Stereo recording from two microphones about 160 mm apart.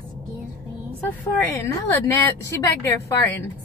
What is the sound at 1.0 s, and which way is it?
Speech, 15° left (ahead or behind).